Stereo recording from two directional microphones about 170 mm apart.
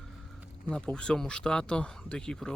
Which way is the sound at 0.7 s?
5° left (ahead or behind).